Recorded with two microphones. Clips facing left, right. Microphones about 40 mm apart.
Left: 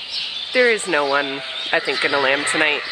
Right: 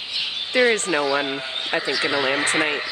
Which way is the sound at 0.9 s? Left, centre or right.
Left.